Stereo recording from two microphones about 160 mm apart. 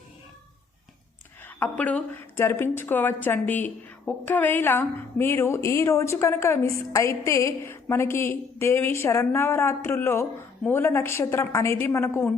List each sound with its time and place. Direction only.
1.5 s a woman's voice: 10° left (ahead or behind)